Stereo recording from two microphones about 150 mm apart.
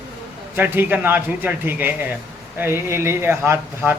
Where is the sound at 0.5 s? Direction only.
15° right (ahead or behind).